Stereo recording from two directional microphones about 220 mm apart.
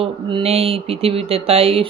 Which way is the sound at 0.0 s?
25° right (ahead or behind).